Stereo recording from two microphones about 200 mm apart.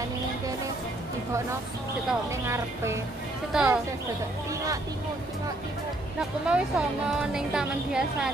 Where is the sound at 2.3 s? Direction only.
15° right (ahead or behind).